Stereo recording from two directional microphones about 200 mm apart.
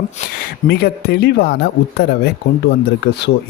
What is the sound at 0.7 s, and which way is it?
Speech, 55° left (ahead or behind).